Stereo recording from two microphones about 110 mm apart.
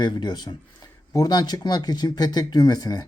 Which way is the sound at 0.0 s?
45° left (ahead or behind).